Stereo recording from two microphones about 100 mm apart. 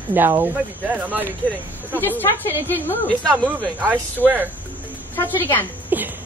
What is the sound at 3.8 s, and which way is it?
Speech, 20° right (ahead or behind).